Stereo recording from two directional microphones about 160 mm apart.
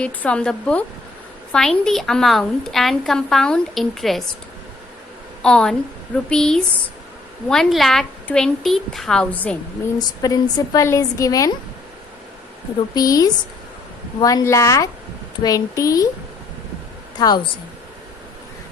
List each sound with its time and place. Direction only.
0.0 s a woman's voice: 5° left (ahead or behind)
5.4 s a woman's voice: 5° left (ahead or behind)
10.0 s a woman's voice: 25° left (ahead or behind)
12.9 s a woman's voice: 20° left (ahead or behind)
17.2 s a woman's voice: 25° left (ahead or behind)